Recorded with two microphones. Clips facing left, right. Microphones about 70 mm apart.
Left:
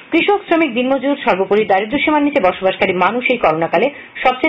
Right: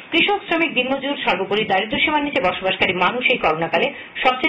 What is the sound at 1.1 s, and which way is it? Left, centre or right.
Speech, left.